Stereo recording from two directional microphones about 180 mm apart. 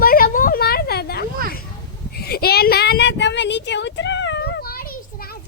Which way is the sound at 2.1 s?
60° left (ahead or behind).